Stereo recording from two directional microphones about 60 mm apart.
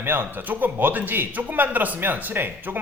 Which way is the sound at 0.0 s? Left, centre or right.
Right.